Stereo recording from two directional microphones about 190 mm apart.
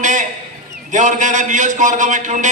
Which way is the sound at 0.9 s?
40° right (ahead or behind).